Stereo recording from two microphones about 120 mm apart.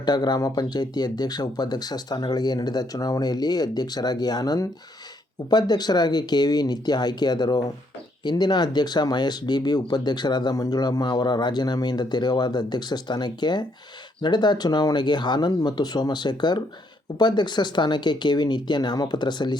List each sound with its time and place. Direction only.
0.0 s speech: 35° left (ahead or behind)